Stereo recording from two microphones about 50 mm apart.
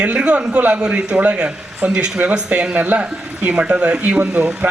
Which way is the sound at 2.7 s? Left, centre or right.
Right.